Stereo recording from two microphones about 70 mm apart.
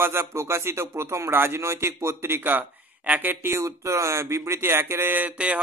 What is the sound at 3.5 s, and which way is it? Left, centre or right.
Speech, right.